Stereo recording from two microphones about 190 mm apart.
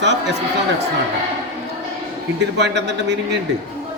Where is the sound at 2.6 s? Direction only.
65° right (ahead or behind).